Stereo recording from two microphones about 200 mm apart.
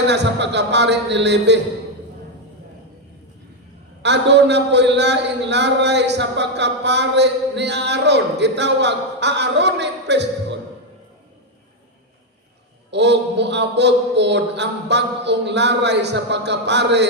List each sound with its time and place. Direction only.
0.1 s a man's voice: 60° right (ahead or behind)
4.0 s a man's voice: 60° right (ahead or behind)
12.9 s a man's voice: 60° right (ahead or behind)